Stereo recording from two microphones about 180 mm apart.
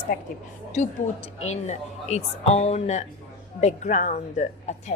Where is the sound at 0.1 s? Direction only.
50° left (ahead or behind).